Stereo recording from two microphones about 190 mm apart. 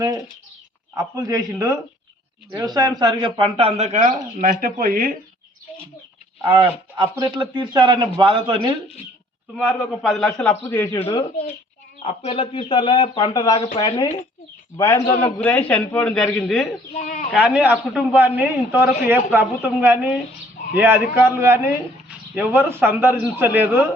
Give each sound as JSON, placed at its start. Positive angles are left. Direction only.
{"t": 0.9, "sound": "a man's voice", "side_deg": -20}
{"t": 6.4, "sound": "speech", "side_deg": -25}
{"t": 9.6, "sound": "a man's voice", "side_deg": 5}
{"t": 12.0, "sound": "a man's voice", "side_deg": 30}
{"t": 16.9, "sound": "speech", "side_deg": 40}
{"t": 17.3, "sound": "a man's voice", "side_deg": -5}